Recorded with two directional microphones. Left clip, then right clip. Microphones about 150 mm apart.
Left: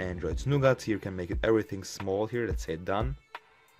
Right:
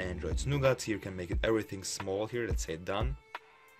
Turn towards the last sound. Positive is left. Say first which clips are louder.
# left 4 dB
turn(degrees=35)  # may be behind; listen again after turning